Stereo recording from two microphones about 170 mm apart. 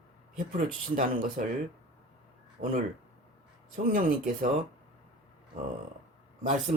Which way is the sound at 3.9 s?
55° right (ahead or behind).